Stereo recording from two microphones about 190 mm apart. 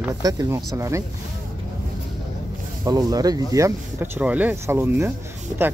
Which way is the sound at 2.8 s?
20° right (ahead or behind).